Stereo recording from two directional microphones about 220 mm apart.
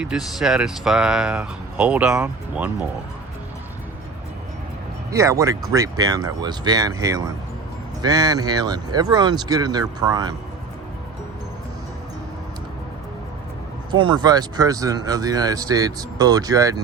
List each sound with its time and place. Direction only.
0.0 s speech: centre (ahead or behind)
5.1 s speech: 15° right (ahead or behind)
13.9 s speech: 20° right (ahead or behind)